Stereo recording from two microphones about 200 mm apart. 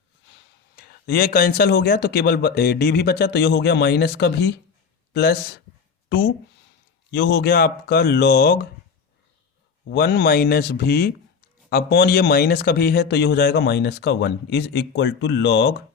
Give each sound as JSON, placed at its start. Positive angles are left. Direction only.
{"t": 0.8, "sound": "speech", "side_deg": 50}
{"t": 9.9, "sound": "speech", "side_deg": 55}